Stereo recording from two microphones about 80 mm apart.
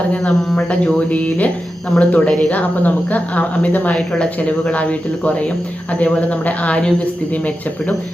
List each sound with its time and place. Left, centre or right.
0.1 s speech: centre